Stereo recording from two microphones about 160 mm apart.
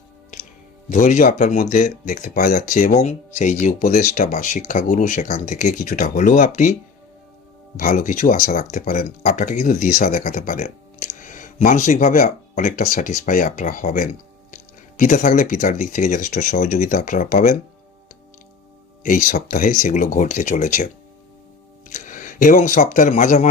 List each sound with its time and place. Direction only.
0.9 s speech: 50° left (ahead or behind)
7.8 s speech: 55° left (ahead or behind)
19.0 s speech: 55° left (ahead or behind)